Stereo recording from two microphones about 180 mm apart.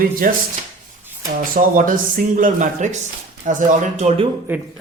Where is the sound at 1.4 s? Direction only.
45° right (ahead or behind).